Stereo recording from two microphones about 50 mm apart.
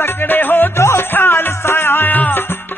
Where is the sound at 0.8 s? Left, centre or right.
Left.